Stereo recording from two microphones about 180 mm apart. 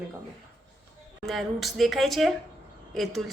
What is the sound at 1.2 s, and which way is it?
A woman's voice, centre (ahead or behind).